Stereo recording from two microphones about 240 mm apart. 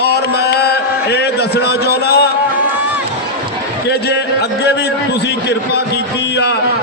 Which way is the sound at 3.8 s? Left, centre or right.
Left.